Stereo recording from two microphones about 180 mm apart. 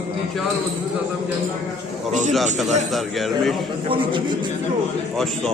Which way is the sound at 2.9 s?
Centre (ahead or behind).